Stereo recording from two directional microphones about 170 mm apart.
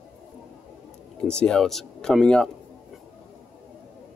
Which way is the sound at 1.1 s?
5° left (ahead or behind).